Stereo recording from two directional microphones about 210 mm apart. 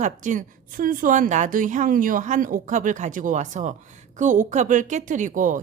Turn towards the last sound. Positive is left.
turn(degrees=-40)  # may be behind; listen again after turning